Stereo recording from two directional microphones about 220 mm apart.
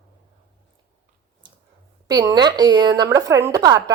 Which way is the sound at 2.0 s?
15° right (ahead or behind).